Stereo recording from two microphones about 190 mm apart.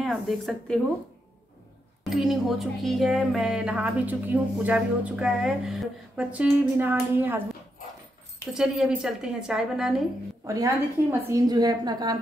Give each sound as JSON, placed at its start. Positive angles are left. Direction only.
{"t": 0.0, "sound": "speech", "side_deg": 0}
{"t": 2.0, "sound": "speech", "side_deg": 0}
{"t": 8.5, "sound": "speech", "side_deg": -5}
{"t": 10.4, "sound": "a woman's voice", "side_deg": -15}